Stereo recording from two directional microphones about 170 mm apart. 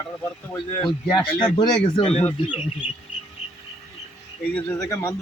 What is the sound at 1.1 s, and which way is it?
Speech, 25° left (ahead or behind).